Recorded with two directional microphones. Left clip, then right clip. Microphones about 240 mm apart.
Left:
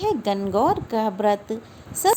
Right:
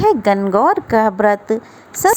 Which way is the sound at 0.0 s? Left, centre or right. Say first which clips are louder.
Right 10 dB; right.